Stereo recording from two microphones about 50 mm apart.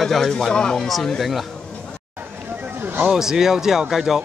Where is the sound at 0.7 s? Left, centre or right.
Centre.